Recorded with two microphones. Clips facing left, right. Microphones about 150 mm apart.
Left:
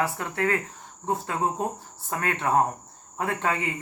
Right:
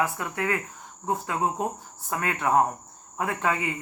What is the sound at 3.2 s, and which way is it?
Speech, 30° left (ahead or behind).